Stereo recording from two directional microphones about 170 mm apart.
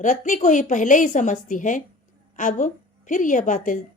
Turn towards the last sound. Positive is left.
turn(degrees=50)  # may be behind; listen again after turning